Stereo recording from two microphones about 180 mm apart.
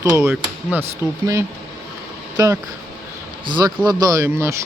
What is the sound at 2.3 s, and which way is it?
A man's voice, 20° right (ahead or behind).